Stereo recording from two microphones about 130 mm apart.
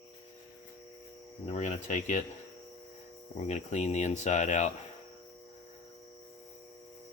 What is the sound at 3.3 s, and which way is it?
Speech, 60° left (ahead or behind).